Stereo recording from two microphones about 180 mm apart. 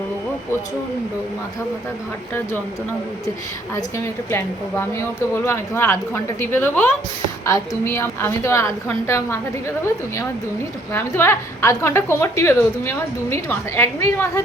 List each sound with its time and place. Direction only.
3.8 s a woman's voice: 15° left (ahead or behind)
10.9 s a woman's voice: 15° left (ahead or behind)